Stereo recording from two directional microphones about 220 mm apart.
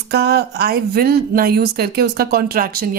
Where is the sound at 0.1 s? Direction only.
50° right (ahead or behind).